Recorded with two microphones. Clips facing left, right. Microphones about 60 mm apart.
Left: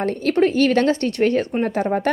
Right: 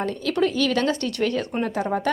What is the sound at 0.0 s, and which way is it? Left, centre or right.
A woman's voice, left.